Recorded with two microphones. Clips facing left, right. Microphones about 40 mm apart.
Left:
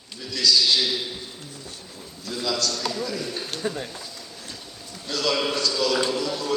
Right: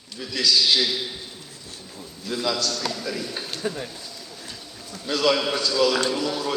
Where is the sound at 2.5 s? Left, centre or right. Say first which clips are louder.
Left 3 dB; centre.